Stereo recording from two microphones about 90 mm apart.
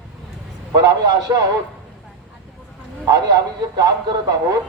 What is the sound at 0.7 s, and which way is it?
Speech, 45° right (ahead or behind).